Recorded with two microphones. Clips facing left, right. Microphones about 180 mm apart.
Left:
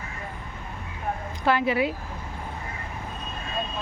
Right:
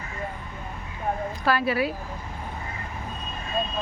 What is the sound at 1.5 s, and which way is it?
Speech, 20° left (ahead or behind).